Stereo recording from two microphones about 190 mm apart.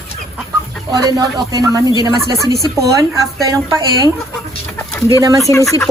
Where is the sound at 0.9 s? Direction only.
20° right (ahead or behind).